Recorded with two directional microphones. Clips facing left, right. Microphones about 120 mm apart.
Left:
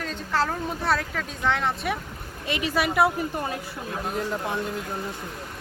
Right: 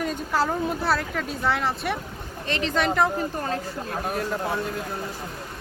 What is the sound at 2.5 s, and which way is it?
Speech, 10° left (ahead or behind).